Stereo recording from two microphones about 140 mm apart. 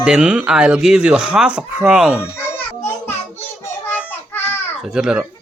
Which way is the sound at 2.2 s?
15° left (ahead or behind).